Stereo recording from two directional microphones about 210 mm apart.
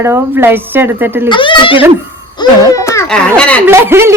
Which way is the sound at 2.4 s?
15° left (ahead or behind).